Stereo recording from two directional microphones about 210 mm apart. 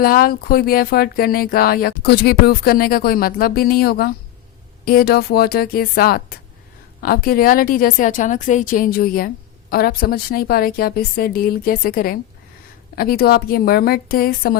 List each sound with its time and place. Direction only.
0.0 s a woman's voice: 45° left (ahead or behind)